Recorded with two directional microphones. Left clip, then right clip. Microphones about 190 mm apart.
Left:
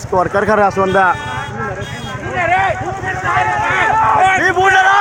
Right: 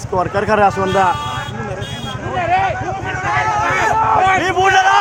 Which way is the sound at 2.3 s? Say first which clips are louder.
Left 2 dB; 25° left (ahead or behind).